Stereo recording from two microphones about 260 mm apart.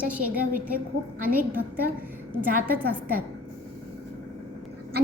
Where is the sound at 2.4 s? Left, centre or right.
Right.